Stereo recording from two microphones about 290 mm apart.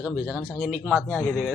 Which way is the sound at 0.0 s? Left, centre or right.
Centre.